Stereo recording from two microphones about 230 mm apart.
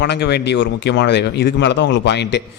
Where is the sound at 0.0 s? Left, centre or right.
Left.